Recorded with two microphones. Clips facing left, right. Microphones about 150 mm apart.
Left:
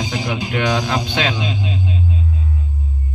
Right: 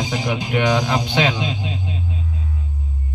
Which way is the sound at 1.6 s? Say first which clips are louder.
Left 4 dB; 45° right (ahead or behind).